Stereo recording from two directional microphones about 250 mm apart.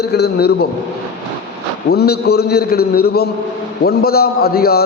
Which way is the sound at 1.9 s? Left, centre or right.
Left.